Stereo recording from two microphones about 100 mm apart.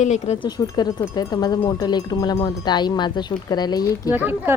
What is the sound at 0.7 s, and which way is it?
Speech, 40° left (ahead or behind).